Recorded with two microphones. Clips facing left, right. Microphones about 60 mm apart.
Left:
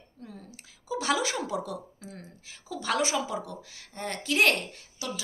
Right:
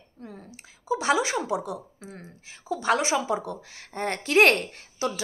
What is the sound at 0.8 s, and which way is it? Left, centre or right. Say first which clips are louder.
A woman's voice: right 4 dB; right.